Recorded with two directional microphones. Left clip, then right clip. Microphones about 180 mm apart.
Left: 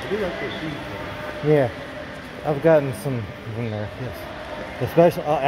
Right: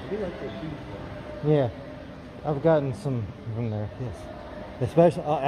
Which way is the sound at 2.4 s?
Centre (ahead or behind).